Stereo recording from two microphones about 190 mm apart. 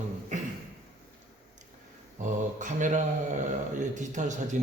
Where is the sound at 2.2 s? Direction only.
40° right (ahead or behind).